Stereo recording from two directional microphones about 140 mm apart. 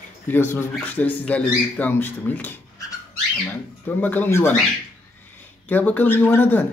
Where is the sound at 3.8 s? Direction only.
15° left (ahead or behind).